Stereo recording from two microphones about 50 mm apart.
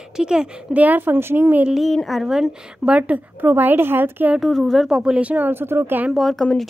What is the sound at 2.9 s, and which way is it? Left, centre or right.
Speech, right.